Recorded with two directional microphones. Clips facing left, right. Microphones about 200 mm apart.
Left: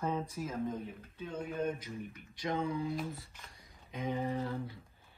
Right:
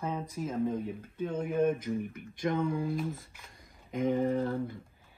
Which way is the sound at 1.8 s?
50° right (ahead or behind).